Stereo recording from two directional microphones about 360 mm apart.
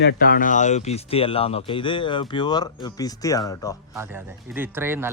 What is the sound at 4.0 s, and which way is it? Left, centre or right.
Speech, centre.